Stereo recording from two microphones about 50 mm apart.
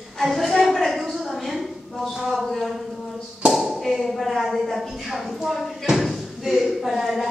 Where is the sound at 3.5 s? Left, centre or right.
Centre.